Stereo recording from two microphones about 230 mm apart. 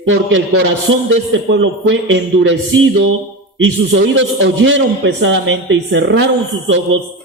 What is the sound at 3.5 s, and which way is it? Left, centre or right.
Speech, right.